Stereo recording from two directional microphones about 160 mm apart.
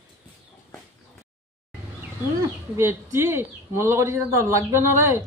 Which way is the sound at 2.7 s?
15° right (ahead or behind).